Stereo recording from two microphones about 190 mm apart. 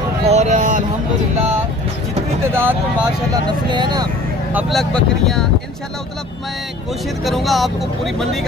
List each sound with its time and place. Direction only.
0.2 s speech: 35° right (ahead or behind)
2.5 s speech: 10° right (ahead or behind)
3.4 s speech: 25° right (ahead or behind)
4.5 s speech: 5° right (ahead or behind)
7.2 s speech: centre (ahead or behind)